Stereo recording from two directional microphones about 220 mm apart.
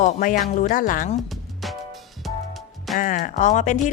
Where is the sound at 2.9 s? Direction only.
35° left (ahead or behind).